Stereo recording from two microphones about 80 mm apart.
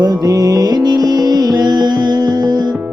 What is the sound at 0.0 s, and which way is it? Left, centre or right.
Music, right.